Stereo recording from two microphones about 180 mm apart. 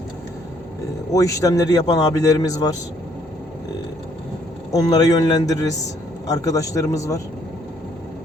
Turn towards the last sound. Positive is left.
turn(degrees=15)  # may be behind; listen again after turning